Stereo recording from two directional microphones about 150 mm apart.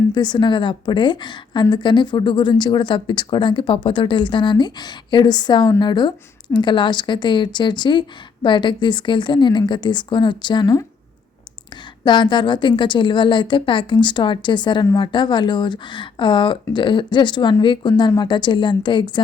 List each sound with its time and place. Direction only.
0.1 s speech: 30° left (ahead or behind)
12.0 s speech: 30° left (ahead or behind)